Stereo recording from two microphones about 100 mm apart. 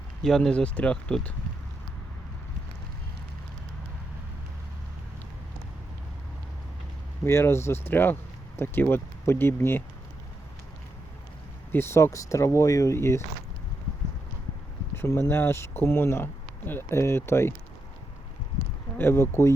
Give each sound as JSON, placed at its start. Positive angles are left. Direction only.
{"t": 0.2, "sound": "speech", "side_deg": 5}
{"t": 7.3, "sound": "speech", "side_deg": 30}
{"t": 11.7, "sound": "speech", "side_deg": 25}
{"t": 15.0, "sound": "speech", "side_deg": 30}
{"t": 18.9, "sound": "speech", "side_deg": 25}